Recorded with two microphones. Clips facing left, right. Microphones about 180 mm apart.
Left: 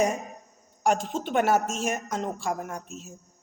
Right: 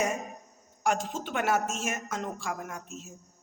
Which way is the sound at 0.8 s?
35° left (ahead or behind).